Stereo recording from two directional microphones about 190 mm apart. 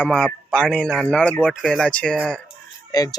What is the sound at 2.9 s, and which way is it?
Speech, 20° left (ahead or behind).